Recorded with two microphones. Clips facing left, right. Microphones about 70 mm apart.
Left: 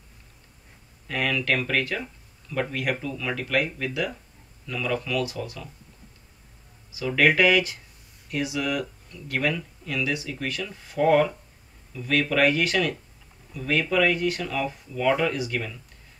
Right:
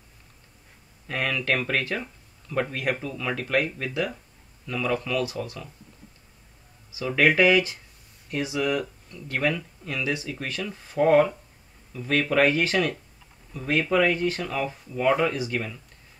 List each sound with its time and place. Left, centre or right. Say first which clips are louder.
1.0 s speech: left 1 dB; right
6.9 s speech: even; right